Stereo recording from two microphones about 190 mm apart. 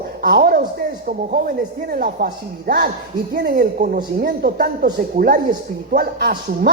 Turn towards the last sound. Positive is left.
turn(degrees=-55)  # may be behind; listen again after turning